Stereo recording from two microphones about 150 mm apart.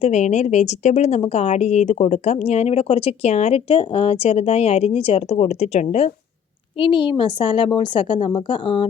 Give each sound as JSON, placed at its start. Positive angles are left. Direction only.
{"t": 0.0, "sound": "a woman's voice", "side_deg": 50}
{"t": 6.7, "sound": "a woman's voice", "side_deg": 35}